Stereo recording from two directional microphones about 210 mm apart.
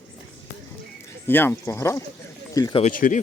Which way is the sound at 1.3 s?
10° left (ahead or behind).